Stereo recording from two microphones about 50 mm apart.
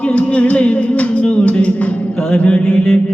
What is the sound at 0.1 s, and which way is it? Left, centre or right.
Music, left.